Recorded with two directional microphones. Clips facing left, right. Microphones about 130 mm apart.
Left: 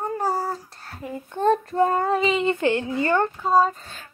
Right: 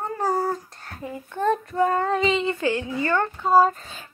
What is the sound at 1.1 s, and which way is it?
Child singing, 30° left (ahead or behind).